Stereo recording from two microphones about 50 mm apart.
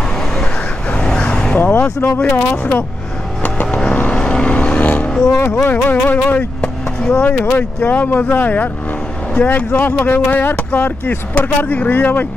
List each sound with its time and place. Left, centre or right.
0.9 s vehicle: left
2.2 s speech: left
3.4 s vehicle: left
4.2 s vehicle: centre
5.4 s speech: left
7.0 s speech: left
7.2 s speech: left